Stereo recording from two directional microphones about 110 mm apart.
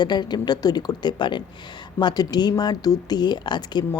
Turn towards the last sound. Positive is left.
turn(degrees=40)  # may be behind; listen again after turning